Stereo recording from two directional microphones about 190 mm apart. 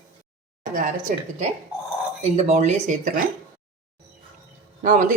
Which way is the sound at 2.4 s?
35° right (ahead or behind).